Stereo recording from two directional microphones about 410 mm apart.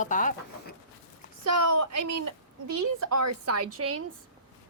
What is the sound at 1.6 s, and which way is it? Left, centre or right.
A woman's voice, right.